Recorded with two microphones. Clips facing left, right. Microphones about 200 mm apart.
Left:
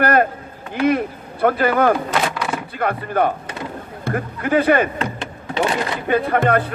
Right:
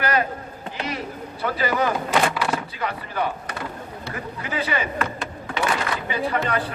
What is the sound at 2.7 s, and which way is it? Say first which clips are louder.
Speech: left 7 dB; 55° left (ahead or behind).